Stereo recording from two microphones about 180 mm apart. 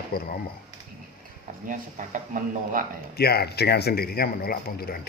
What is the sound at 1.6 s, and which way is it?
Speech, 45° right (ahead or behind).